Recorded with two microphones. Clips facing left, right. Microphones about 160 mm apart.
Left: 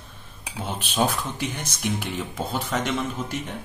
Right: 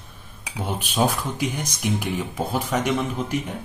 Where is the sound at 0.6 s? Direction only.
10° right (ahead or behind).